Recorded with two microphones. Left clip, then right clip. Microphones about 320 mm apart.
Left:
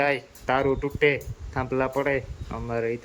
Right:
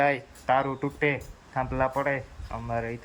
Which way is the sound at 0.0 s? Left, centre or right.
Centre.